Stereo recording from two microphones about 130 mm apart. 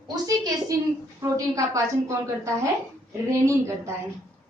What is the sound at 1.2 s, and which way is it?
A woman's voice, 25° right (ahead or behind).